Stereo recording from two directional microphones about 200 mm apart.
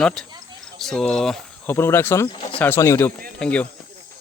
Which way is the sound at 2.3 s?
25° left (ahead or behind).